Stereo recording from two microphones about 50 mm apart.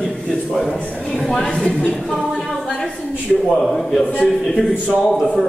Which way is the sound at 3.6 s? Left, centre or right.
Centre.